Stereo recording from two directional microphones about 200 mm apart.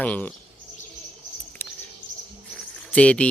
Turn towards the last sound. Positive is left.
turn(degrees=5)  # may be behind; listen again after turning